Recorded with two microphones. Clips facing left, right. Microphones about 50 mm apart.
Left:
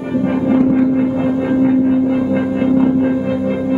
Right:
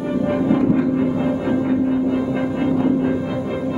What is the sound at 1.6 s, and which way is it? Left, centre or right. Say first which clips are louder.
Music: left 6 dB; centre.